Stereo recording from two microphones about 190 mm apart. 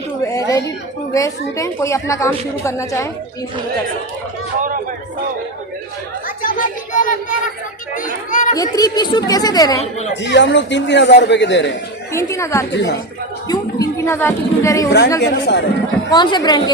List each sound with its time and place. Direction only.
0.2 s a sound: 15° left (ahead or behind)
1.1 s a woman's voice: 15° left (ahead or behind)
6.2 s a sound: 45° left (ahead or behind)
7.9 s a child's voice: 45° left (ahead or behind)
8.5 s a woman's voice: 20° left (ahead or behind)
10.2 s a man's voice: 65° left (ahead or behind)
12.1 s a woman's voice: 15° left (ahead or behind)
12.7 s a man's voice: 65° left (ahead or behind)
13.5 s a woman's voice: 15° left (ahead or behind)
14.8 s speech: 65° left (ahead or behind)
16.1 s a woman's voice: 25° left (ahead or behind)